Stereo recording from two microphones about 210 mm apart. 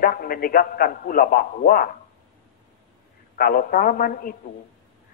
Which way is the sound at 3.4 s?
45° left (ahead or behind).